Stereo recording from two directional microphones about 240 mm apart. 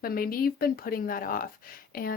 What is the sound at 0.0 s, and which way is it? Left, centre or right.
Speech, left.